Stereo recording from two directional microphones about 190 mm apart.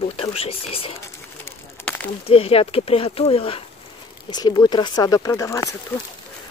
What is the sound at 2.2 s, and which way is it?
Speech, 30° left (ahead or behind).